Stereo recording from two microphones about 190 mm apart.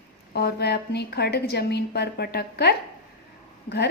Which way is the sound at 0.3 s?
60° left (ahead or behind).